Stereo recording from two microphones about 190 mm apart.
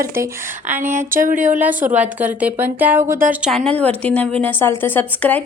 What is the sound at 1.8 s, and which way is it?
Speech, 40° right (ahead or behind).